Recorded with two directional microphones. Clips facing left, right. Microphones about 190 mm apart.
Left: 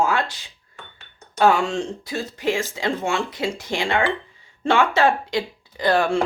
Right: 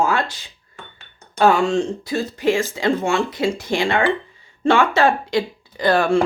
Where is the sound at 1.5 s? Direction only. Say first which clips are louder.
Right 5 dB; 45° right (ahead or behind).